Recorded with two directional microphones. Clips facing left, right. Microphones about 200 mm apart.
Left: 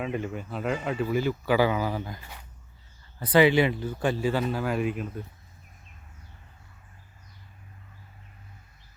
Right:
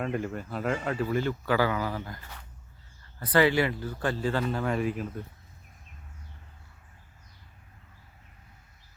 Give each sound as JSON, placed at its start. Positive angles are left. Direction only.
{"t": 0.0, "sound": "speech", "side_deg": 5}